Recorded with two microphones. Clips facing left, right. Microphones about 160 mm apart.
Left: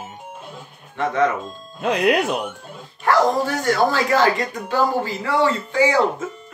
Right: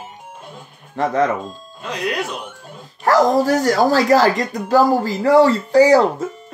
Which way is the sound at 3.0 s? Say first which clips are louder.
Right 3 dB; 40° right (ahead or behind).